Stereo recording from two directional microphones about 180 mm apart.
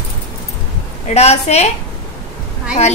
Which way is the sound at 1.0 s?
35° left (ahead or behind).